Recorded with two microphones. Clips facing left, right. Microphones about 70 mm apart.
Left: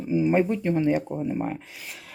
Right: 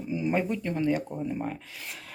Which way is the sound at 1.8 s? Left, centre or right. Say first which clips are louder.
Even; centre.